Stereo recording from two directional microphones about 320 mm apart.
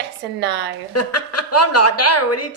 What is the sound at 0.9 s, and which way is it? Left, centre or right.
Speech, left.